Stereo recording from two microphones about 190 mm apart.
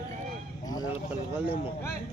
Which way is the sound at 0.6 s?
20° left (ahead or behind).